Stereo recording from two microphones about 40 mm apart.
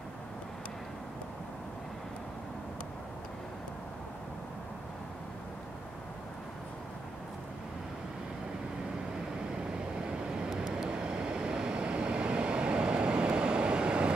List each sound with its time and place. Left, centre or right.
9.7 s vehicle: centre